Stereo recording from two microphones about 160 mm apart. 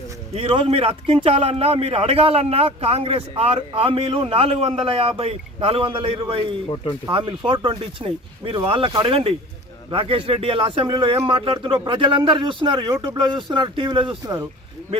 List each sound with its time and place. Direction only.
0.3 s a man's voice: 35° right (ahead or behind)